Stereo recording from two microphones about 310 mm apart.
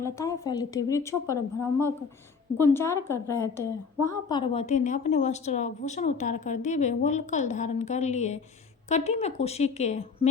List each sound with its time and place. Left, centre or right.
0.0 s a woman's voice: centre